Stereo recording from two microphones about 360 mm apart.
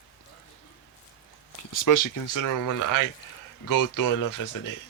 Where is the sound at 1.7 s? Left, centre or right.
Left.